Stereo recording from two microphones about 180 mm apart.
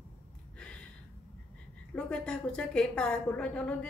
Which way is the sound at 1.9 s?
5° left (ahead or behind).